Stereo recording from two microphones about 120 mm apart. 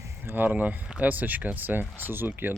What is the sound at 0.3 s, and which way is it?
Speech, 15° right (ahead or behind).